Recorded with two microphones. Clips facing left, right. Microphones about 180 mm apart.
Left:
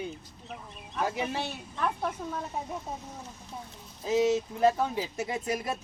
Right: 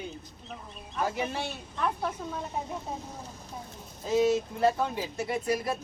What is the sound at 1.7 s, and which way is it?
Speech, centre (ahead or behind).